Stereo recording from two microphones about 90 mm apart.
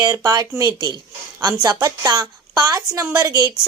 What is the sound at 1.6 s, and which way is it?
Speech, 50° right (ahead or behind).